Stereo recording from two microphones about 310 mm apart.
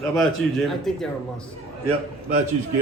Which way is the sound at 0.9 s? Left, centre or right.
Centre.